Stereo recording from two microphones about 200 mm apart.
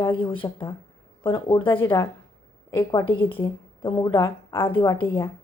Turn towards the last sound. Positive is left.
turn(degrees=15)  # may be behind; listen again after turning